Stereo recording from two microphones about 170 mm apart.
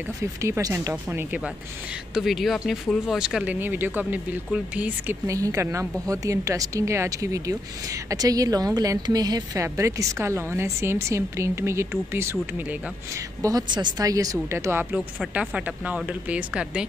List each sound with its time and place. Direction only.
0.2 s speech: 15° right (ahead or behind)
2.1 s a woman's voice: centre (ahead or behind)